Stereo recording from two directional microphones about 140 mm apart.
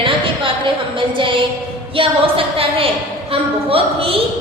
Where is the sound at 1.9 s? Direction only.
40° right (ahead or behind).